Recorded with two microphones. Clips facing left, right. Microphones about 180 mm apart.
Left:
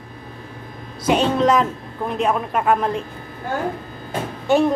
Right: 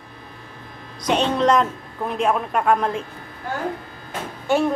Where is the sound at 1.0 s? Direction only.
5° left (ahead or behind).